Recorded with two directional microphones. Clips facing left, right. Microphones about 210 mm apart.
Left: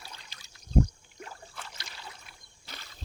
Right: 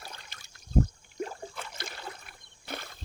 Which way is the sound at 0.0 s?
55° right (ahead or behind).